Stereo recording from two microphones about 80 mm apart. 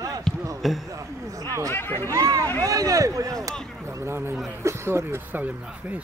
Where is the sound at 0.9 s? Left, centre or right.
Right.